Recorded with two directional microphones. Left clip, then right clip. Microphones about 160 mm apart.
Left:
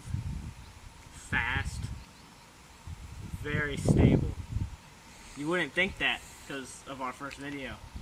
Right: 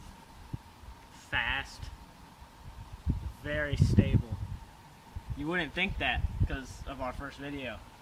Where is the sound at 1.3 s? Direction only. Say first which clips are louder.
Left 1 dB; 25° right (ahead or behind).